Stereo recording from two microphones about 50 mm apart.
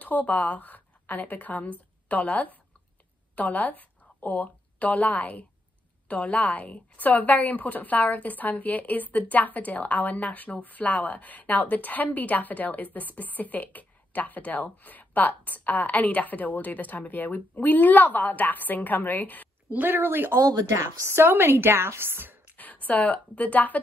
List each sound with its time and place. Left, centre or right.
0.0 s a woman's voice: left
19.7 s speech: right
20.3 s speech: right
21.2 s speech: right
22.6 s a woman's voice: left